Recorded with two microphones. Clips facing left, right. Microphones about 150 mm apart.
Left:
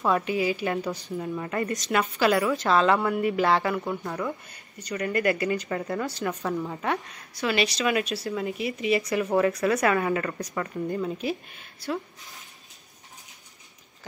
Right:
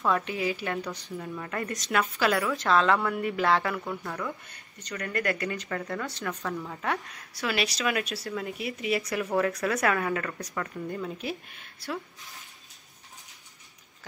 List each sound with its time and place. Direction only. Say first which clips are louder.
0.1 s speech: left 4 dB; 5° left (ahead or behind)
3.8 s speech: left 4 dB; 20° left (ahead or behind)
5.8 s speech: left 4 dB; 20° left (ahead or behind)
6.0 s speech: left 5 dB; 5° left (ahead or behind)
6.4 s speech: left 5 dB; 20° left (ahead or behind)
6.8 s speech: left 3 dB; centre (ahead or behind)